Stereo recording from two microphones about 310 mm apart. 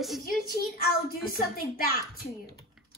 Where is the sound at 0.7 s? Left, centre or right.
Left.